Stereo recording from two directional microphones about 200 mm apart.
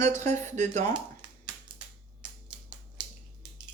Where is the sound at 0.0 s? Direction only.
35° right (ahead or behind).